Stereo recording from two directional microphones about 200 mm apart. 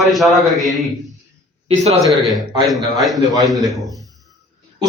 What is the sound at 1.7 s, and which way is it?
Speech, 30° right (ahead or behind).